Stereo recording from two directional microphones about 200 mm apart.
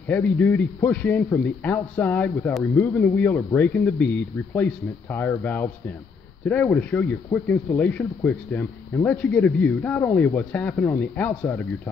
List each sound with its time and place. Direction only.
0.1 s a man's voice: 10° left (ahead or behind)